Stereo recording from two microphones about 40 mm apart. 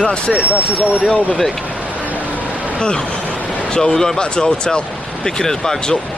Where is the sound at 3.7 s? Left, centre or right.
Centre.